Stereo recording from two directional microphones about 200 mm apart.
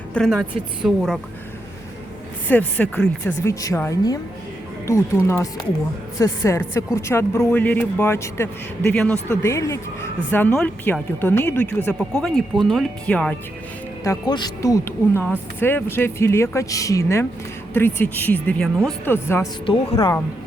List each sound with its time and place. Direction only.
0.1 s a woman's voice: 5° left (ahead or behind)
2.5 s speech: 10° left (ahead or behind)
14.0 s speech: 20° left (ahead or behind)